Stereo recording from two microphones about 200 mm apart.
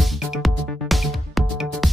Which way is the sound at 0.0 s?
Centre (ahead or behind).